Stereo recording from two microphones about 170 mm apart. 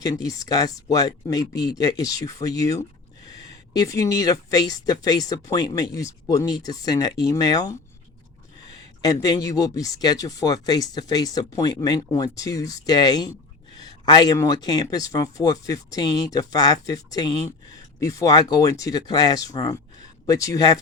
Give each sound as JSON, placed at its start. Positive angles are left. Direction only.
{"t": 0.0, "sound": "speech", "side_deg": 20}
{"t": 9.0, "sound": "speech", "side_deg": 20}